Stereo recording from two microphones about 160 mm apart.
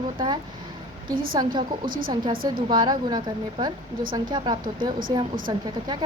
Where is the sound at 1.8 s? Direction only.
65° right (ahead or behind).